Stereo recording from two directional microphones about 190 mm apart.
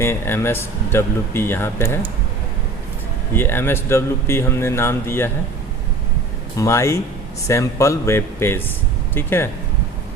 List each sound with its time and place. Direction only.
0.0 s speech: 10° left (ahead or behind)
3.3 s speech: 10° left (ahead or behind)
6.6 s speech: 15° left (ahead or behind)